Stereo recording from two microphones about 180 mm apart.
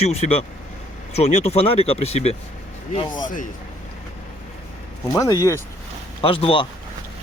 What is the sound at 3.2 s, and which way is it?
Speech, 45° left (ahead or behind).